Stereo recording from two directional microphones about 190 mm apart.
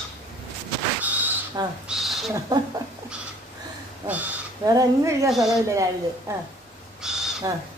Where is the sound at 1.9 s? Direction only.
Centre (ahead or behind).